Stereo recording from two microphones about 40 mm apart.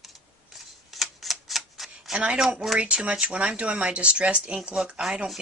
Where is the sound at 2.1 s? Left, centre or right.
Right.